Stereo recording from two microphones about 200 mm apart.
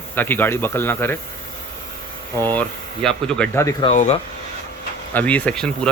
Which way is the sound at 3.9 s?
35° left (ahead or behind).